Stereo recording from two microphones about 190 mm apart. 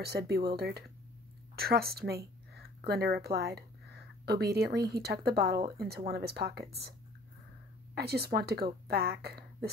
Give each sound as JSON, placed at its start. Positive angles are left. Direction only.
{"t": 0.0, "sound": "speech", "side_deg": -55}
{"t": 7.9, "sound": "speech", "side_deg": -55}